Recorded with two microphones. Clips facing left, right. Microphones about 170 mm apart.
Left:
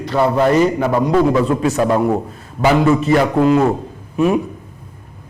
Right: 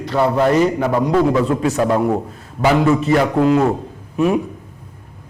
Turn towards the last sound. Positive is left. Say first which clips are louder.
# left 1 dB
turn(degrees=20)  # may be behind; listen again after turning